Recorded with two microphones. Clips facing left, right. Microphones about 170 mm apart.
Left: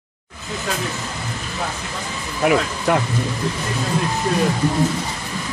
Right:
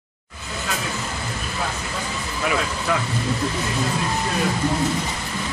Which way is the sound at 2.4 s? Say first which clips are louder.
Left 7 dB; 50° left (ahead or behind).